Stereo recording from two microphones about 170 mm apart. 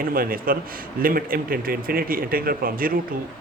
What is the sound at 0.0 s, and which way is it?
Speech, 60° right (ahead or behind).